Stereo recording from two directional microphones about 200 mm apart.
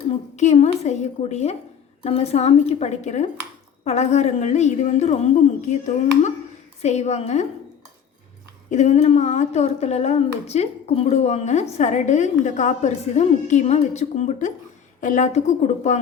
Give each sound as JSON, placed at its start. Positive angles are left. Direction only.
{"t": 0.3, "sound": "a woman's voice", "side_deg": 35}
{"t": 8.7, "sound": "a woman's voice", "side_deg": 35}